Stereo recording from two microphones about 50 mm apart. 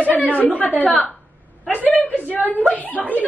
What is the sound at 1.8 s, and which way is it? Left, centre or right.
Speech, right.